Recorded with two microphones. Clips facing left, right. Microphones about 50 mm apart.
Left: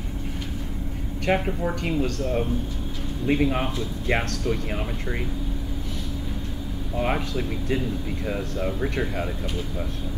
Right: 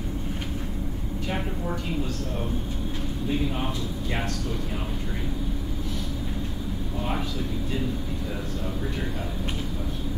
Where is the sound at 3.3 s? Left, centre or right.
Left.